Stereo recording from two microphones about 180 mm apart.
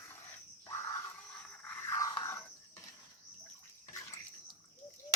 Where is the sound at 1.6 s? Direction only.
15° left (ahead or behind).